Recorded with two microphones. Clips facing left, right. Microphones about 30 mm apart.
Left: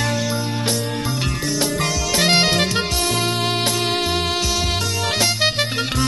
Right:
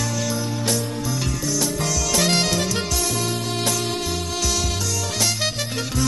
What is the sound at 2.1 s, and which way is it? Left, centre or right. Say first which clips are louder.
Music: left 4 dB; left.